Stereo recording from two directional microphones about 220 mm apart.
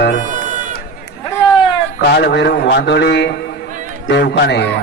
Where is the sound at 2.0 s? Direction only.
50° left (ahead or behind).